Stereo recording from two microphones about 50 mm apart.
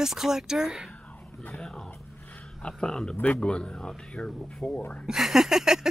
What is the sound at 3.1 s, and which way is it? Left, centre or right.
Speech, left.